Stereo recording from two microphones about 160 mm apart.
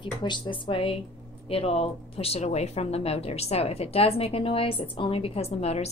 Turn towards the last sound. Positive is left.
turn(degrees=40)  # may be behind; listen again after turning